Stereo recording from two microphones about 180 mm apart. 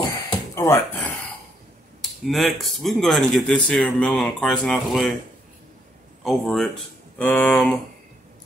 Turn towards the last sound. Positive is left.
turn(degrees=10)  # may be behind; listen again after turning